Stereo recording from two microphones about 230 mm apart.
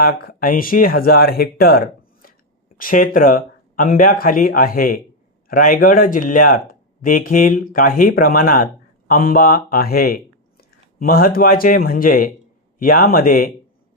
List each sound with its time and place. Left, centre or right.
0.0 s speech: left